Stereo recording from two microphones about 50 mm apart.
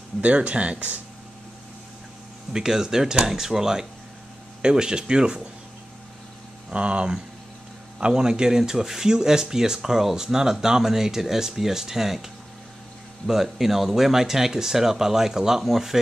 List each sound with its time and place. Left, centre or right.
0.2 s speech: right
2.5 s speech: centre
6.7 s speech: right
13.3 s speech: centre